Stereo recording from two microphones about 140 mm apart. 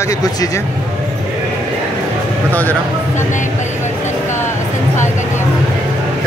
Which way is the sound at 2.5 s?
10° left (ahead or behind).